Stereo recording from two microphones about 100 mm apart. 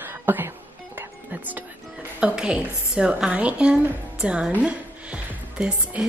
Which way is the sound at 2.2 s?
10° right (ahead or behind).